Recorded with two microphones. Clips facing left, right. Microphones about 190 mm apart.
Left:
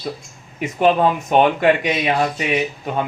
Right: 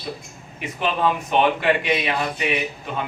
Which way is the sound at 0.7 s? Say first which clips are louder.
Left 6 dB; 50° left (ahead or behind).